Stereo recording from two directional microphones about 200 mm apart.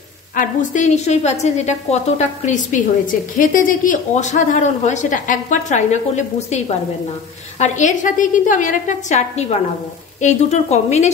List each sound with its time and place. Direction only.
0.4 s a woman's voice: 40° left (ahead or behind)